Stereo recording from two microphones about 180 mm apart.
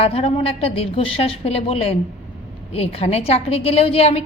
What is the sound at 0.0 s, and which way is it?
A woman's voice, 35° left (ahead or behind).